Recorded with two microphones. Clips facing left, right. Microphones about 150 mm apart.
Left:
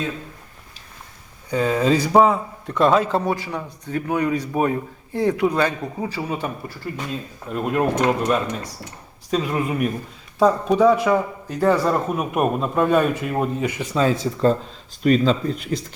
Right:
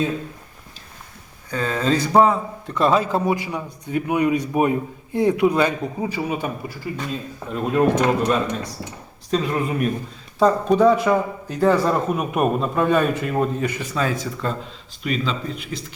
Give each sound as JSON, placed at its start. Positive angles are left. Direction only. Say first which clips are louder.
{"t": 1.5, "sound": "a man's voice", "louder": "left 3 dB", "side_deg": 15}
{"t": 7.5, "sound": "a man's voice", "louder": "right 2 dB", "side_deg": 5}
{"t": 9.3, "sound": "a man's voice", "louder": "even", "side_deg": 5}
{"t": 13.6, "sound": "speech", "louder": "left 2 dB", "side_deg": 15}
{"t": 15.0, "sound": "speech", "louder": "left 7 dB", "side_deg": 40}